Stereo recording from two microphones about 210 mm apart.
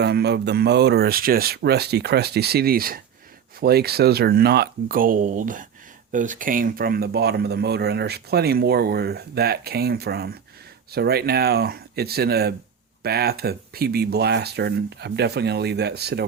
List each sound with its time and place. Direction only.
0.0 s speech: 50° right (ahead or behind)